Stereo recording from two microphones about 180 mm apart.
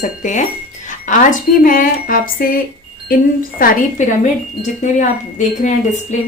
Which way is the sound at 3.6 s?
50° left (ahead or behind).